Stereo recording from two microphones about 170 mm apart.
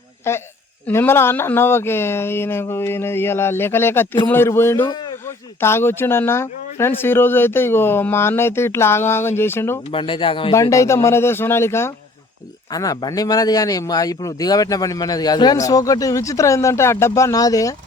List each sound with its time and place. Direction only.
0.3 s speech: 15° left (ahead or behind)
9.9 s speech: 30° left (ahead or behind)
10.5 s speech: 20° left (ahead or behind)